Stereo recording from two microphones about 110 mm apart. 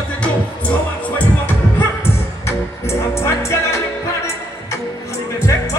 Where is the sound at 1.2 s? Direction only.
15° left (ahead or behind).